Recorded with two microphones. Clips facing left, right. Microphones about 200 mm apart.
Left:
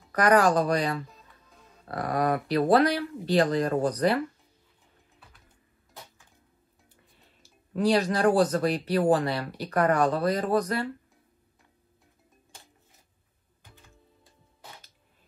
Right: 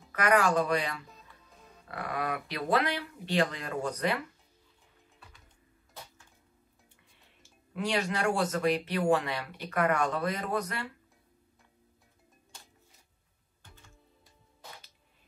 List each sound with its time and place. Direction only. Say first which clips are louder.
0.1 s speech: left 5 dB; 40° left (ahead or behind)
7.4 s speech: left 9 dB; 40° left (ahead or behind)